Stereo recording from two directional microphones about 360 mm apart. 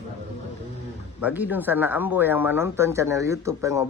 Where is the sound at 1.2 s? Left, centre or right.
Centre.